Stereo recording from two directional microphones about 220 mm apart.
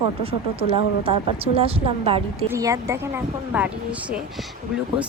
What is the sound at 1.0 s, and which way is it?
Speech, 25° right (ahead or behind).